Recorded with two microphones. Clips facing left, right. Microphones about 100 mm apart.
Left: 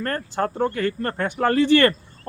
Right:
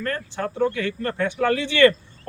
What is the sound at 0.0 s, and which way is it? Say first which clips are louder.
Speech: left 3 dB; 45° left (ahead or behind).